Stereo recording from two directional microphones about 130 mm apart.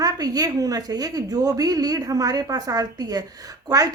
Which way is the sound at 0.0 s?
30° right (ahead or behind).